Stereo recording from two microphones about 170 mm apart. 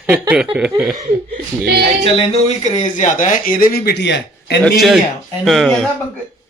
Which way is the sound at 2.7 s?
45° left (ahead or behind).